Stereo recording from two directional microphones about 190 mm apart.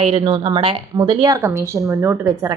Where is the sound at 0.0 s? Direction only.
30° right (ahead or behind).